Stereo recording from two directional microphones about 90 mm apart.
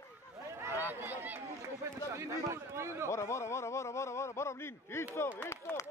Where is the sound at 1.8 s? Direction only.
35° right (ahead or behind).